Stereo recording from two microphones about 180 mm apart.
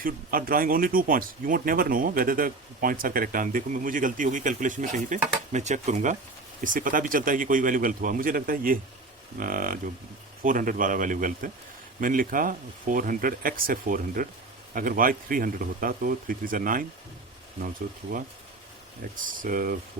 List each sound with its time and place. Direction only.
0.0 s speech: 55° right (ahead or behind)
19.2 s speech: 50° right (ahead or behind)